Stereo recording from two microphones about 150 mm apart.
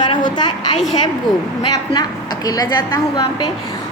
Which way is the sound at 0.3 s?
30° left (ahead or behind).